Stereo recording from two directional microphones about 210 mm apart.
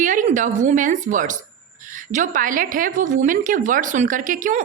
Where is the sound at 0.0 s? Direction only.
35° right (ahead or behind).